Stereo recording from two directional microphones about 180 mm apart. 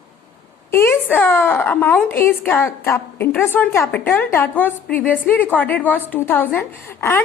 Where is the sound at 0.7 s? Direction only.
15° left (ahead or behind).